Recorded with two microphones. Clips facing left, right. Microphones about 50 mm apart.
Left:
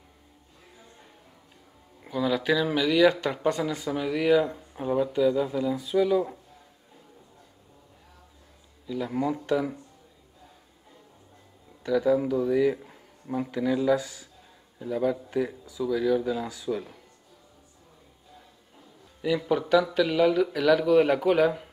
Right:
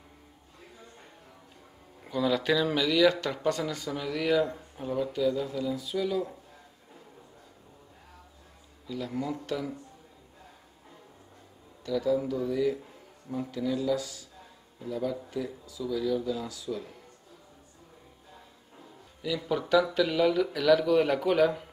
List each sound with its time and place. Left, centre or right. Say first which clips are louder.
2.0 s speech: left 1 dB; centre
8.9 s speech: left 5 dB; left
11.8 s speech: left 4 dB; left
14.8 s speech: left 5 dB; left
19.2 s speech: left 6 dB; left
19.7 s speech: left 1 dB; centre